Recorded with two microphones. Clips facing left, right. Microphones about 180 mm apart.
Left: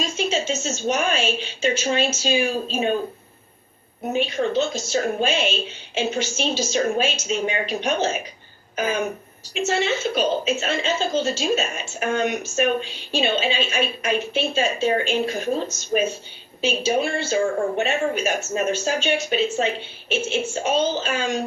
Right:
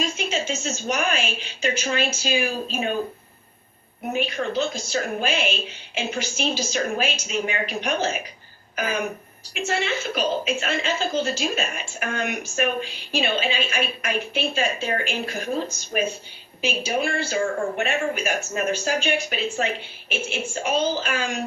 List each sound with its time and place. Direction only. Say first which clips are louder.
0.2 s a woman's voice: left 3 dB; 30° left (ahead or behind)
4.1 s a woman's voice: left 3 dB; 25° left (ahead or behind)
8.7 s a sound: left 3 dB; 25° left (ahead or behind)
9.6 s a woman's voice: left 3 dB; 25° left (ahead or behind)